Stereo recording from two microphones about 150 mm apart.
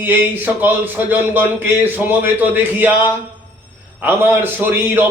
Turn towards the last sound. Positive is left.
turn(degrees=-15)  # may be behind; listen again after turning